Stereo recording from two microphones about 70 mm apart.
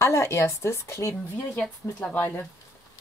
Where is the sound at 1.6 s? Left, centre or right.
Centre.